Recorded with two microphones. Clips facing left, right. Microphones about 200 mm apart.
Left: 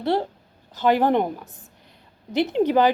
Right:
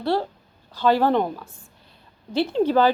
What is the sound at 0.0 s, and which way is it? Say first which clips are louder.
A woman's voice: left 1 dB; 20° left (ahead or behind).